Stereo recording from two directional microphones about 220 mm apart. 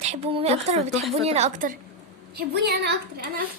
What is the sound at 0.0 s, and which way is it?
A woman's voice, 25° right (ahead or behind).